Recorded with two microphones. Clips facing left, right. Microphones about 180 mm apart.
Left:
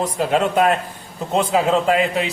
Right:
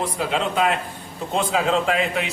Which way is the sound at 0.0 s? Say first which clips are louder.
Left 5 dB; 45° left (ahead or behind).